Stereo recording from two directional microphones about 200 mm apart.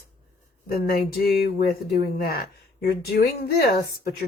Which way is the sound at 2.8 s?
50° left (ahead or behind).